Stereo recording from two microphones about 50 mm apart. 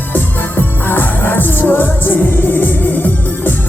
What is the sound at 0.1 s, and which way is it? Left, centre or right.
Music, left.